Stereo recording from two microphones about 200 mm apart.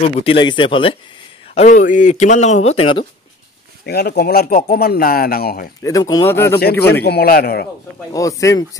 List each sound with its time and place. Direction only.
0.0 s speech: 30° left (ahead or behind)
1.5 s speech: 35° left (ahead or behind)
3.8 s speech: 55° left (ahead or behind)
5.8 s speech: 15° left (ahead or behind)
6.6 s speech: 55° left (ahead or behind)
8.1 s speech: 15° left (ahead or behind)